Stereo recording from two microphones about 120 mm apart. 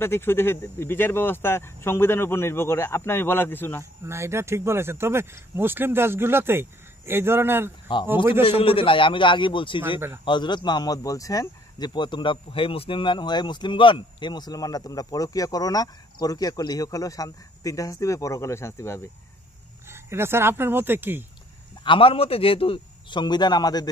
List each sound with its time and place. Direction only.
0.0 s speech: 20° left (ahead or behind)
4.0 s speech: 20° right (ahead or behind)
8.5 s a man's voice: 50° left (ahead or behind)
9.9 s speech: 20° right (ahead or behind)
10.2 s speech: 40° left (ahead or behind); by 19.0 s 20° left (ahead or behind)
19.9 s speech: 20° right (ahead or behind)
21.8 s a man's voice: 45° left (ahead or behind)